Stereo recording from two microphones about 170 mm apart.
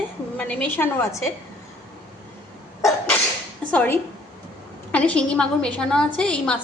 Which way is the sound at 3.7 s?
10° left (ahead or behind).